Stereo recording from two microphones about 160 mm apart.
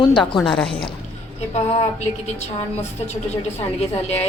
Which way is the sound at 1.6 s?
40° left (ahead or behind).